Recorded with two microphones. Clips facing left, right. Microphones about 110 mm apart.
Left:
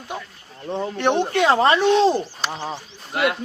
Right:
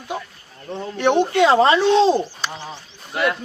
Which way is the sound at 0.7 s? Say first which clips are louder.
Right 2 dB; 25° left (ahead or behind).